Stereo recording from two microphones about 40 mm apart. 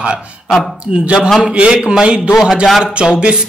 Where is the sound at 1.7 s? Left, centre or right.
Centre.